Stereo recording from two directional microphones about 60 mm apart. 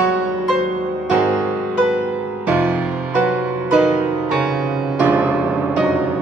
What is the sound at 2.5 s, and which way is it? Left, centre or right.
Music, right.